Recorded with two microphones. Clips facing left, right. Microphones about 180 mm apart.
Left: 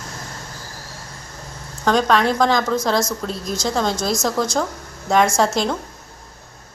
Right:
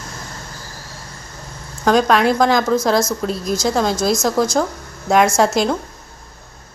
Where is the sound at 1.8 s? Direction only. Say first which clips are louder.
Right 3 dB; 10° right (ahead or behind).